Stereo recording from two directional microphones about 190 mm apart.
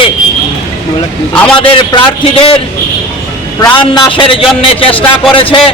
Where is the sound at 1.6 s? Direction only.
25° left (ahead or behind).